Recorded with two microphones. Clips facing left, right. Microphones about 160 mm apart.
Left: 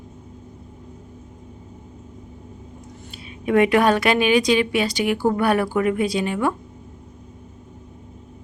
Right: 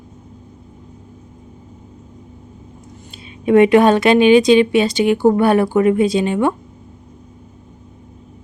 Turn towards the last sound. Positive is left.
turn(degrees=-25)  # may be behind; listen again after turning